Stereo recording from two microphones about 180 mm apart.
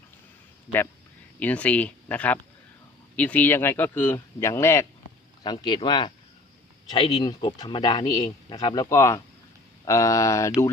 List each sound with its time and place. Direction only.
1.4 s speech: 10° left (ahead or behind)